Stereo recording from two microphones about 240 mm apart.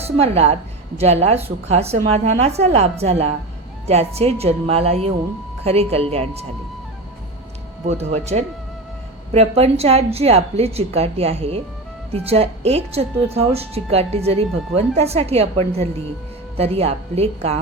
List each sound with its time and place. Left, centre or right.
0.2 s a woman's voice: right
7.9 s a woman's voice: right